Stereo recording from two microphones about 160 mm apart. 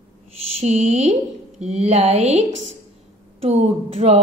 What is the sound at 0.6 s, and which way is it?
Speech, 40° right (ahead or behind).